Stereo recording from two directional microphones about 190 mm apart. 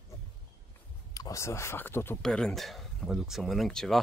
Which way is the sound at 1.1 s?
15° left (ahead or behind).